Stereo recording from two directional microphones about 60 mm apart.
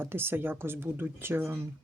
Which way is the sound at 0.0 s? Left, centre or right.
Right.